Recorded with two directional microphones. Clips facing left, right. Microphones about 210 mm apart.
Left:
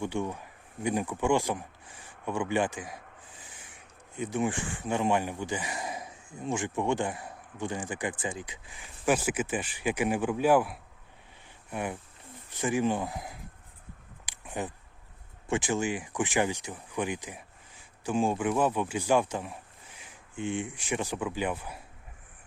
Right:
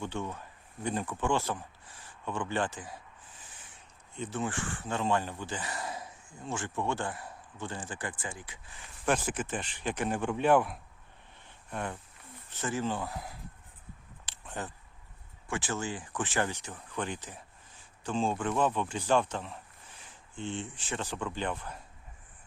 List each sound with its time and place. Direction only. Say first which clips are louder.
0.0 s speech: left 5 dB; 10° left (ahead or behind)
14.3 s a sound: left 4 dB; 10° left (ahead or behind)
15.4 s speech: left 6 dB; 15° left (ahead or behind)